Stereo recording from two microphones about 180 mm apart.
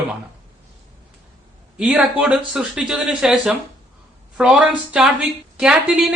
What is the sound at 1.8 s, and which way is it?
A woman's voice, 5° right (ahead or behind).